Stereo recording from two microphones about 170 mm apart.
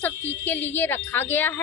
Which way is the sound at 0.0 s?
10° left (ahead or behind).